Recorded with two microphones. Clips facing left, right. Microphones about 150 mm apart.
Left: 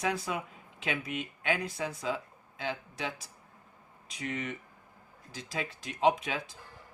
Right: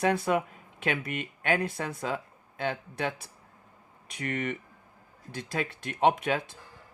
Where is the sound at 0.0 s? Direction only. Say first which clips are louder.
Right 7 dB; 60° right (ahead or behind).